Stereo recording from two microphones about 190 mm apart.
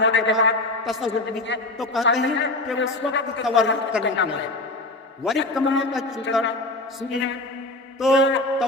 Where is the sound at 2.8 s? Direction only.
70° left (ahead or behind).